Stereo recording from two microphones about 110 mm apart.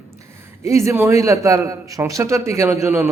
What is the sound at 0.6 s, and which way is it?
A man's voice, 25° right (ahead or behind).